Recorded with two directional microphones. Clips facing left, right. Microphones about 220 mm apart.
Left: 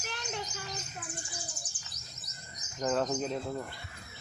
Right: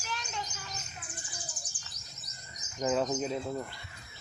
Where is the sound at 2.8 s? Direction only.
5° right (ahead or behind).